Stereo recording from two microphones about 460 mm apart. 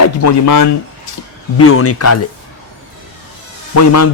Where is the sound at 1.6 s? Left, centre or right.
Left.